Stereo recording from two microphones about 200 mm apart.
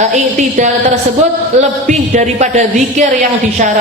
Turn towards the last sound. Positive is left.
turn(degrees=-35)  # may be behind; listen again after turning